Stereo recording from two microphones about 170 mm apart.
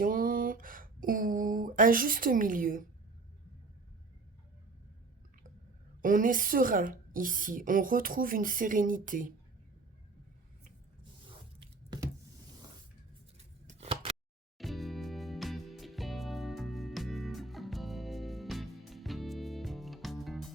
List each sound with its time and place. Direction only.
0.0 s a sound: 55° right (ahead or behind)
6.0 s a woman's voice: 50° right (ahead or behind)
13.7 s scissors: 40° right (ahead or behind)
14.6 s music: centre (ahead or behind)